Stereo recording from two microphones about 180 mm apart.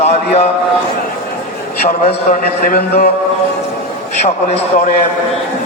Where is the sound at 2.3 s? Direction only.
55° left (ahead or behind).